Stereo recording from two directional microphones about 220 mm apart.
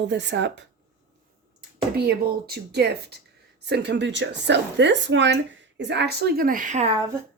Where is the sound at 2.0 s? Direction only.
45° right (ahead or behind).